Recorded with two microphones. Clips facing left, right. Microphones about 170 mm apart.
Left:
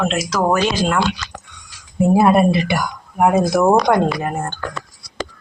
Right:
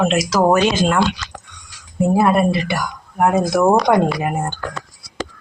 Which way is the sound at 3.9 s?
10° right (ahead or behind).